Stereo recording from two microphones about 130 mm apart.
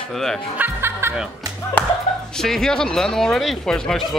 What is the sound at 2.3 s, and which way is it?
Speech, 5° left (ahead or behind).